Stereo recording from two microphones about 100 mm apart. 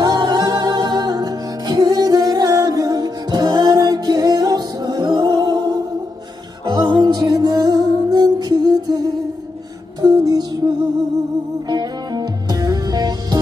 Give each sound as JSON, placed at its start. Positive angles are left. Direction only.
{"t": 0.0, "sound": "music", "side_deg": -40}
{"t": 11.7, "sound": "music", "side_deg": -45}